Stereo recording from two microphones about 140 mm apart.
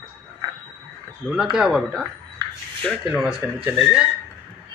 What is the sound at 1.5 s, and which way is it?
Speech, 5° right (ahead or behind).